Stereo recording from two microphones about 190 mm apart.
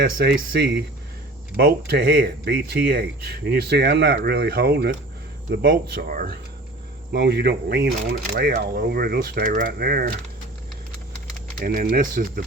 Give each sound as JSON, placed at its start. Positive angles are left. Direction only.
{"t": 0.0, "sound": "speech", "side_deg": -55}
{"t": 7.1, "sound": "speech", "side_deg": -60}
{"t": 8.3, "sound": "speech", "side_deg": -45}
{"t": 11.6, "sound": "speech", "side_deg": -50}